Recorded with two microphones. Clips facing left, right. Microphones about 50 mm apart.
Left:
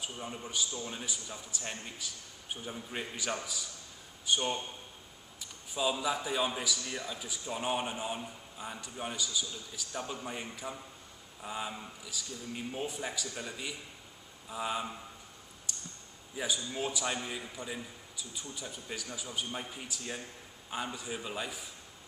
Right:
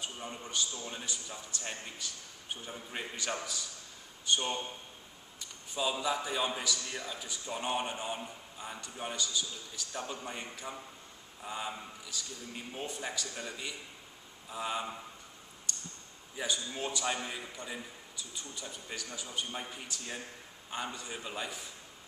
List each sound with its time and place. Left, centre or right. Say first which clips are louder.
0.0 s a man's voice: left 1 dB; centre
15.7 s a sound: right 2 dB; centre
16.3 s a man's voice: left 1 dB; centre
18.3 s a man's voice: left 2 dB; centre